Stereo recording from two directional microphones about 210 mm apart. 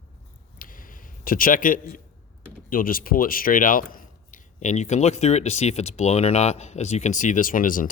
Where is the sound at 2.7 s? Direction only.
40° left (ahead or behind).